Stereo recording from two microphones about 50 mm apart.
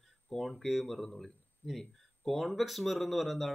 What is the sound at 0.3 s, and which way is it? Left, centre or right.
Speech, centre.